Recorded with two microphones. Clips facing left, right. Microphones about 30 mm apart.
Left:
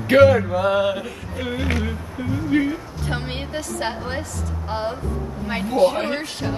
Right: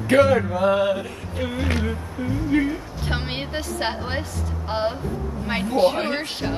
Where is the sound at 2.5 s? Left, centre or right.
Centre.